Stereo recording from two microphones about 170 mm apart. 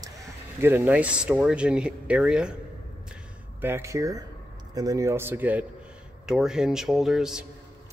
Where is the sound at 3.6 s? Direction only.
15° right (ahead or behind).